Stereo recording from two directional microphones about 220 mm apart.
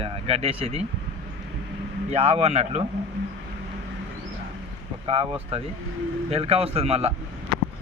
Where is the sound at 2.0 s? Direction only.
30° right (ahead or behind).